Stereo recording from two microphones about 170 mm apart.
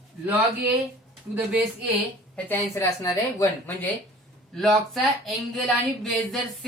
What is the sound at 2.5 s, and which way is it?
Speech, 15° left (ahead or behind).